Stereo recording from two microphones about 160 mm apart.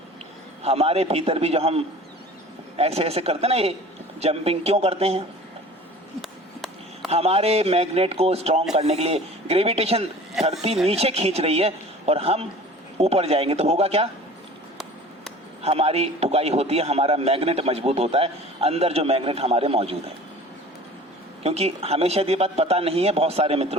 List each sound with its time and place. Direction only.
0.6 s a man's voice: 40° right (ahead or behind)
6.2 s a sound: centre (ahead or behind)
7.1 s a man's voice: 40° right (ahead or behind)
10.4 s speech: centre (ahead or behind)
10.8 s a man's voice: 40° right (ahead or behind)
15.6 s a man's voice: 40° right (ahead or behind)
21.4 s a man's voice: 40° right (ahead or behind)